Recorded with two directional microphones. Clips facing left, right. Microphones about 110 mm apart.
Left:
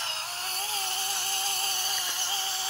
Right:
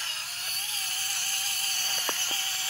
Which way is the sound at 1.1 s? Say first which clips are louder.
Left 7 dB; 25° left (ahead or behind).